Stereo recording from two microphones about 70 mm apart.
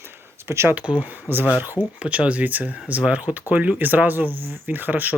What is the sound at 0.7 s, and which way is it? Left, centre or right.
Speech, centre.